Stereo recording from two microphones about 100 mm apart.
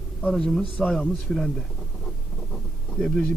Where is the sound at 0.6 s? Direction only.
10° left (ahead or behind).